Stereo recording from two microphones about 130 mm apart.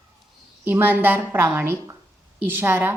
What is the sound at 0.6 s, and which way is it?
A woman's voice, 15° right (ahead or behind).